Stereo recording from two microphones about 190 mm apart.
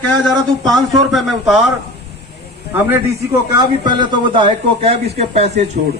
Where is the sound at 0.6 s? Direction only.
Centre (ahead or behind).